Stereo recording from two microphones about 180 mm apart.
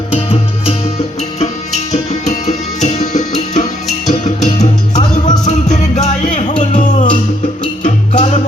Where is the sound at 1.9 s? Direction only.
40° left (ahead or behind).